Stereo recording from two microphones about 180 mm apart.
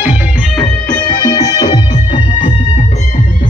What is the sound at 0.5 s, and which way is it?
Music, 10° left (ahead or behind).